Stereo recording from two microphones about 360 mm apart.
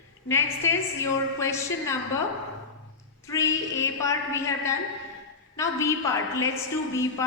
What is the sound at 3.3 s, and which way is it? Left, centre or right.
A woman's voice, centre.